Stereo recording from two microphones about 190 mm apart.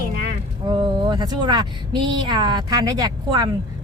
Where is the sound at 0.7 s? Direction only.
20° right (ahead or behind).